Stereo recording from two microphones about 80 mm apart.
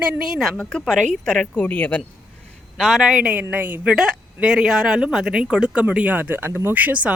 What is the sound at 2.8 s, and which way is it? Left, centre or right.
A woman's voice, centre.